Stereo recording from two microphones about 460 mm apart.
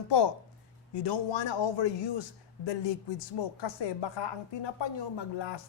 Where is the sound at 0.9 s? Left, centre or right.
Left.